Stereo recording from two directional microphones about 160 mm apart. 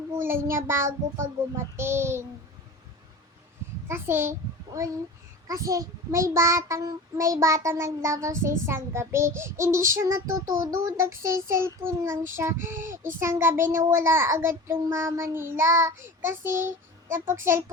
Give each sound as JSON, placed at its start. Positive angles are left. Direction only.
{"t": 0.1, "sound": "child singing", "side_deg": -15}
{"t": 3.8, "sound": "a child's voice", "side_deg": -15}
{"t": 5.5, "sound": "child singing", "side_deg": -20}